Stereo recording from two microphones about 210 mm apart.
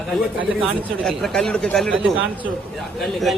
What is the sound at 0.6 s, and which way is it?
A man's voice, centre (ahead or behind).